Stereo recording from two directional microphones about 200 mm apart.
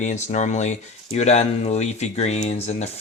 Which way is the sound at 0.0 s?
35° left (ahead or behind).